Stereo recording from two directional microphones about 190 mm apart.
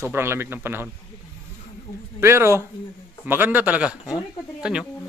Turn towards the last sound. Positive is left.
turn(degrees=-5)  # may be behind; listen again after turning